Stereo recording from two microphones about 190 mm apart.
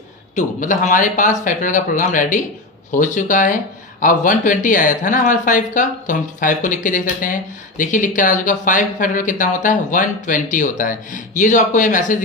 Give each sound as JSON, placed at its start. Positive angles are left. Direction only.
{"t": 0.3, "sound": "speech", "side_deg": 40}